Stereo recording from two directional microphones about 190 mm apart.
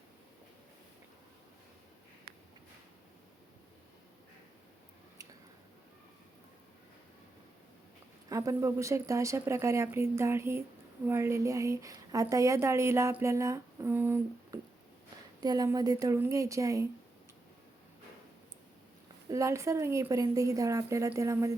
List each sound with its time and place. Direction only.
8.3 s a woman's voice: 15° right (ahead or behind)
19.3 s a woman's voice: 15° right (ahead or behind)